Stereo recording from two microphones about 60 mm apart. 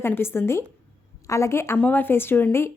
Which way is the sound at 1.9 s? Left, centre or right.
Left.